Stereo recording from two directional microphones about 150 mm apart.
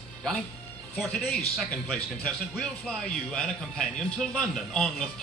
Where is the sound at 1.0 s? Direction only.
5° left (ahead or behind).